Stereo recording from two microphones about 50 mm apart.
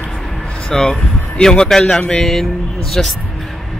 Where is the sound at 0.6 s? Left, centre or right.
Centre.